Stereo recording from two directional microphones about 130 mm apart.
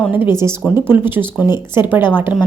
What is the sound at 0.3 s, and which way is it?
A woman's voice, 20° right (ahead or behind).